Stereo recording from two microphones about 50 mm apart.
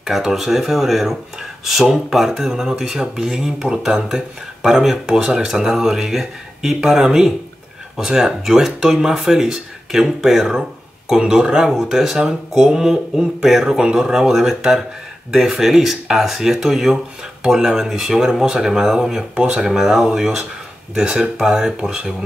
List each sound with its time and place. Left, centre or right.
0.0 s speech: centre
19.3 s speech: centre
19.7 s speech: centre